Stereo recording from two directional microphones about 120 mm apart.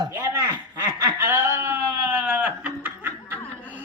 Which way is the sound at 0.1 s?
20° right (ahead or behind).